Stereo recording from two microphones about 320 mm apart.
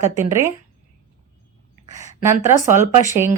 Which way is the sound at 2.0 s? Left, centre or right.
Left.